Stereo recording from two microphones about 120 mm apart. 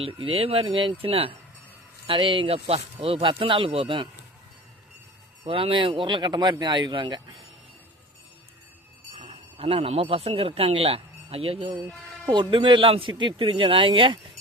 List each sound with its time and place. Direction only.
0.0 s speech: 50° right (ahead or behind)
5.5 s speech: 50° right (ahead or behind)
9.1 s speech: 55° right (ahead or behind)
12.3 s speech: 40° right (ahead or behind)